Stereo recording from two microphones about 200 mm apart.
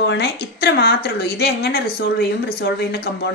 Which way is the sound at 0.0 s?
60° left (ahead or behind).